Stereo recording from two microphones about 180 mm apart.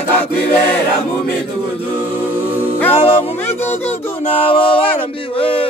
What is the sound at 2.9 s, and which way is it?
Music, 35° left (ahead or behind).